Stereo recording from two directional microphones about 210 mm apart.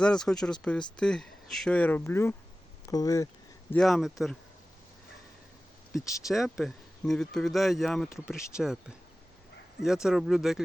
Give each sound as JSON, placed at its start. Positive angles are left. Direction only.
{"t": 0.0, "sound": "speech", "side_deg": 5}
{"t": 3.7, "sound": "speech", "side_deg": 0}
{"t": 6.2, "sound": "speech", "side_deg": 0}
{"t": 9.8, "sound": "speech", "side_deg": 0}